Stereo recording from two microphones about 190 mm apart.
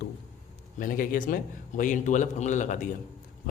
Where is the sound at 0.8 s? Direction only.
45° left (ahead or behind).